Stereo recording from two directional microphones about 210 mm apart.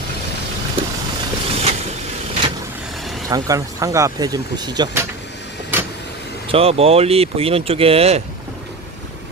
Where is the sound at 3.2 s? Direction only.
15° right (ahead or behind).